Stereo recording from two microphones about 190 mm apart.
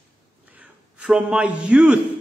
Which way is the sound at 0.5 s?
5° right (ahead or behind).